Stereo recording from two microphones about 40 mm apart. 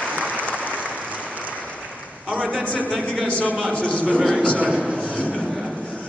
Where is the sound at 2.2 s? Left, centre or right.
Right.